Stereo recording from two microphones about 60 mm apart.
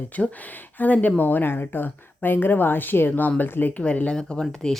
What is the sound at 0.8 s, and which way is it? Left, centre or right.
Speech, left.